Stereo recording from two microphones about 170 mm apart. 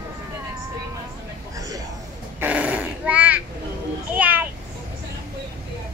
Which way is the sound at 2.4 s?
10° right (ahead or behind).